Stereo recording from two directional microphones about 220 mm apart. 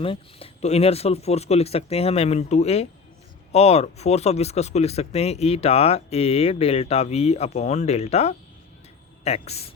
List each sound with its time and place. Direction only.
0.0 s speech: 25° left (ahead or behind)